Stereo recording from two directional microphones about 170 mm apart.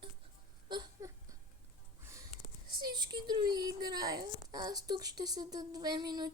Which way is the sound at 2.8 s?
25° right (ahead or behind).